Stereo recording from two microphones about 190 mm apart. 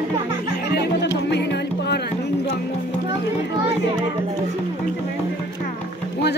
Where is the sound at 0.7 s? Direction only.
60° left (ahead or behind).